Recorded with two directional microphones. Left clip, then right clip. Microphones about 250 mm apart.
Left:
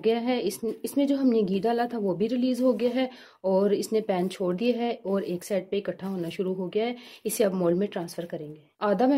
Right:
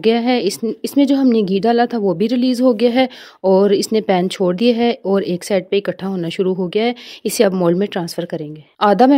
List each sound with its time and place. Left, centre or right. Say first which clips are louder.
0.0 s speech: right 10 dB; right